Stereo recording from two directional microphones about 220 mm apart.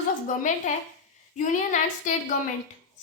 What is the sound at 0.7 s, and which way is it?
Speech, 35° left (ahead or behind).